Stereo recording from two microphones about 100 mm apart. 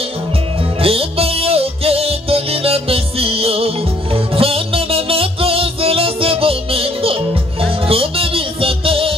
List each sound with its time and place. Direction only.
0.7 s music: 70° right (ahead or behind)